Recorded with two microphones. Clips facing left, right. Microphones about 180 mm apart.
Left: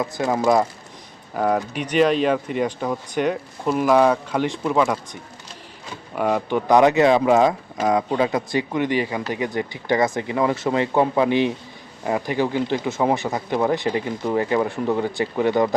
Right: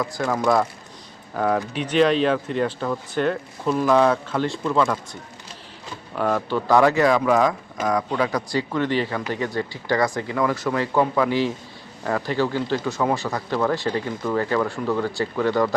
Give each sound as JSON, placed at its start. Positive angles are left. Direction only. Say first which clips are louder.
{"t": 0.0, "sound": "speech", "louder": "left 2 dB", "side_deg": 25}
{"t": 1.4, "sound": "speech", "louder": "left 1 dB", "side_deg": 5}
{"t": 6.1, "sound": "speech", "louder": "left 2 dB", "side_deg": 15}